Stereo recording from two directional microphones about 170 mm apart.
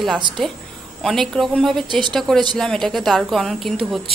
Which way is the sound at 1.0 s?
Centre (ahead or behind).